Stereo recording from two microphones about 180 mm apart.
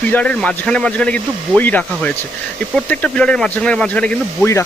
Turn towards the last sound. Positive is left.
turn(degrees=10)  # may be behind; listen again after turning